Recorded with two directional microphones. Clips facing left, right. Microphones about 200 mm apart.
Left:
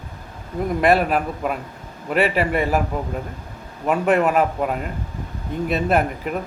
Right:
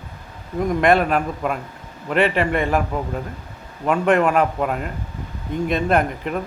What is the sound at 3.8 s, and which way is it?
A man's voice, 5° left (ahead or behind).